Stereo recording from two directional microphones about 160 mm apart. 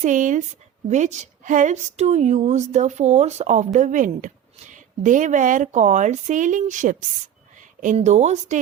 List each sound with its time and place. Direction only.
0.0 s a woman's voice: 50° right (ahead or behind)